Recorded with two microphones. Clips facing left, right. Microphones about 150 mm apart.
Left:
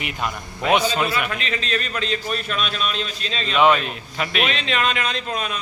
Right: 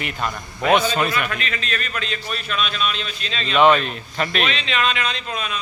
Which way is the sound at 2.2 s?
45° left (ahead or behind).